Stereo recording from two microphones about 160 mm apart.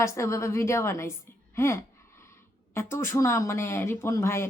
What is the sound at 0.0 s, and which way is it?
A woman's voice, 20° left (ahead or behind).